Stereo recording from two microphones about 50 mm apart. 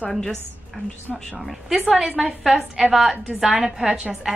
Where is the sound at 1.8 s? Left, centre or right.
Centre.